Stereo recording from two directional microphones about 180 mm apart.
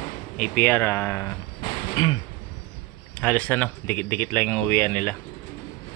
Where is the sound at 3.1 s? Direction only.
10° left (ahead or behind).